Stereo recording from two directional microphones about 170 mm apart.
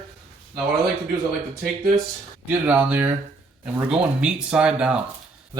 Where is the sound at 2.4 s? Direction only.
10° right (ahead or behind).